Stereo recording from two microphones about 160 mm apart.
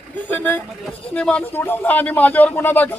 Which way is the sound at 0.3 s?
10° left (ahead or behind).